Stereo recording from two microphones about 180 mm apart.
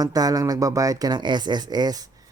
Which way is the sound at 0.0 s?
20° right (ahead or behind).